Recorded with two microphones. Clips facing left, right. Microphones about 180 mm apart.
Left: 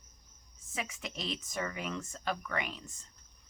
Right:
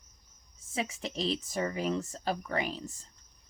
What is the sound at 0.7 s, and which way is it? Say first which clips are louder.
Speech: right 6 dB; 30° right (ahead or behind).